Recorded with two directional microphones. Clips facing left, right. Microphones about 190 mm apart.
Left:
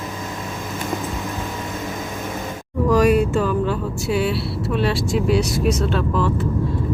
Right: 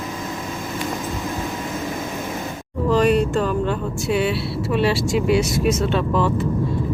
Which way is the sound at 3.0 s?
5° left (ahead or behind).